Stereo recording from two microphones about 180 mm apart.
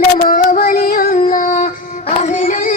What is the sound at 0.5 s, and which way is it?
Child singing, 50° left (ahead or behind).